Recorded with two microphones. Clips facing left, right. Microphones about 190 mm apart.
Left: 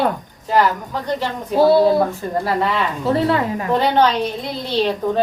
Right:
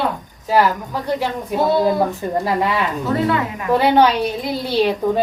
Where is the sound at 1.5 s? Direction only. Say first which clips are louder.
Left 4 dB; 30° left (ahead or behind).